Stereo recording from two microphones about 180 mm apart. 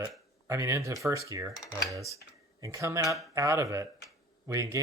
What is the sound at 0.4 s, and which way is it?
Speech, 15° right (ahead or behind).